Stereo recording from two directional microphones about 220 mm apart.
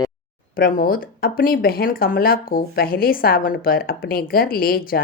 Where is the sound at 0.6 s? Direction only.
40° left (ahead or behind).